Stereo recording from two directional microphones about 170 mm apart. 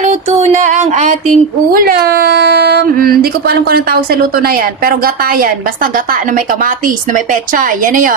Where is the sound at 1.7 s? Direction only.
60° right (ahead or behind).